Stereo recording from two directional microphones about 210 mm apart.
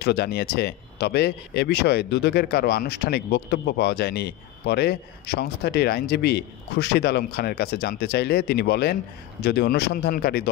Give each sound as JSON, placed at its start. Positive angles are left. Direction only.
{"t": 0.0, "sound": "speech", "side_deg": 50}